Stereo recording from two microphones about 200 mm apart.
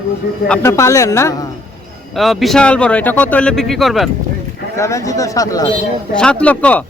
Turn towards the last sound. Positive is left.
turn(degrees=5)  # may be behind; listen again after turning